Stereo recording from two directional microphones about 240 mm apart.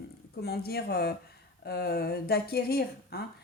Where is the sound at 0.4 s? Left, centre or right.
Left.